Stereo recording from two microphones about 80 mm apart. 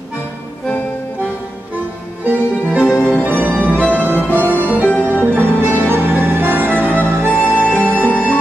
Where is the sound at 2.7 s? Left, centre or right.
Centre.